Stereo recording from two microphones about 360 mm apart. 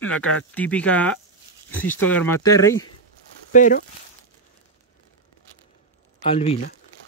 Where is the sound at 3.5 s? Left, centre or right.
Left.